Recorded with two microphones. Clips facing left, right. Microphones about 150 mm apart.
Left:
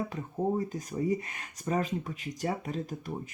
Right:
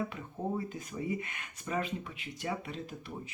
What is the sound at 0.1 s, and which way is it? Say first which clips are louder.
Speech: left 6 dB; 40° left (ahead or behind).